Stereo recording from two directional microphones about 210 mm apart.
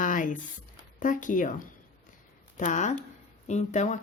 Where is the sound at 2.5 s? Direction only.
35° left (ahead or behind).